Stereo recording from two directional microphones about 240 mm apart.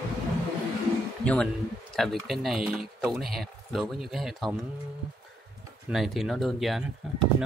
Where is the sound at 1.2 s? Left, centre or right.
Centre.